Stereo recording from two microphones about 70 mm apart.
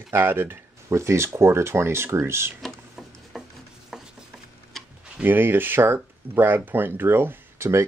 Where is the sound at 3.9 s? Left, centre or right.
Centre.